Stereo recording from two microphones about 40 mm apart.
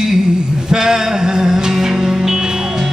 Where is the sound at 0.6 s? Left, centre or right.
Centre.